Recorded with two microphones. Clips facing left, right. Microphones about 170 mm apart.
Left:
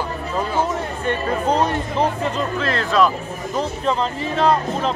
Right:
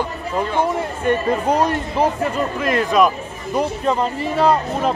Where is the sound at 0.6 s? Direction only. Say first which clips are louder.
Right 3 dB; 10° right (ahead or behind).